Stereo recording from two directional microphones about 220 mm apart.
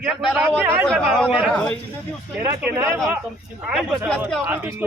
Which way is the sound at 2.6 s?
10° right (ahead or behind).